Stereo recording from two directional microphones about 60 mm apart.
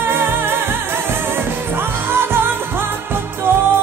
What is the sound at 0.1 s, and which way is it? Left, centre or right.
Music, right.